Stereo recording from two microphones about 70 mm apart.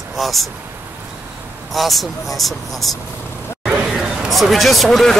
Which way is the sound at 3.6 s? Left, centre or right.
Centre.